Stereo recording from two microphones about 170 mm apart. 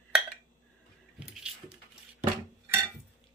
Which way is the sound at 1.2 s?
5° right (ahead or behind).